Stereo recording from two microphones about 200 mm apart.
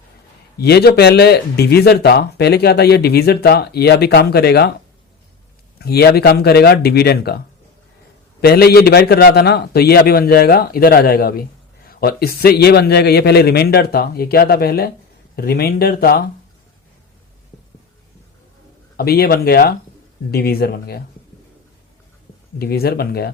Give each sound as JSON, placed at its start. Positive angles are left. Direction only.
{"t": 0.6, "sound": "speech", "side_deg": 55}
{"t": 5.8, "sound": "speech", "side_deg": 50}
{"t": 8.4, "sound": "speech", "side_deg": 50}
{"t": 18.9, "sound": "speech", "side_deg": 50}
{"t": 22.5, "sound": "speech", "side_deg": 50}